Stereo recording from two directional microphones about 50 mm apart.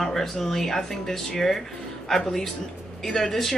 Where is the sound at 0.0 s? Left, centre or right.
Centre.